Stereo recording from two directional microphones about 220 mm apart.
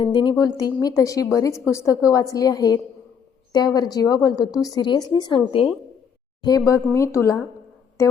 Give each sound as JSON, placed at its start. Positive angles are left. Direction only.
{"t": 0.0, "sound": "speech", "side_deg": 20}